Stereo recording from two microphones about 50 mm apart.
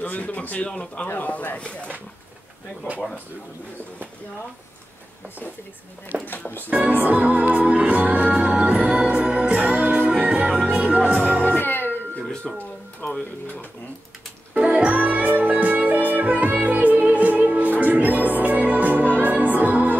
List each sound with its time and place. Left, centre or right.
0.0 s speech: left
1.0 s speech: left
6.2 s speech: left
6.7 s music: right
11.5 s music: left
12.5 s speech: centre
13.0 s speech: left
14.5 s music: right